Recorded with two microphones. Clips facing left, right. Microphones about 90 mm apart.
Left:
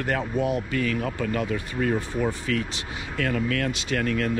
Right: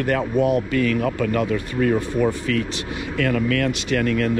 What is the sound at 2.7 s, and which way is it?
Speech, 20° left (ahead or behind).